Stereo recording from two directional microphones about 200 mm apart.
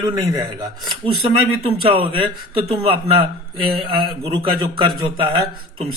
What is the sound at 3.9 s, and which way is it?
A man's voice, 25° right (ahead or behind).